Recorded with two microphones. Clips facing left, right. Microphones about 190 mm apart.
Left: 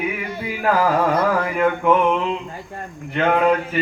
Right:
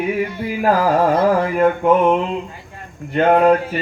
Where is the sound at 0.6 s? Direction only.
35° right (ahead or behind).